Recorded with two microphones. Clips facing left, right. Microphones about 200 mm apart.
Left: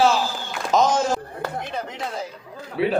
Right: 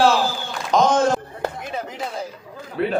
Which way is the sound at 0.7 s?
5° left (ahead or behind).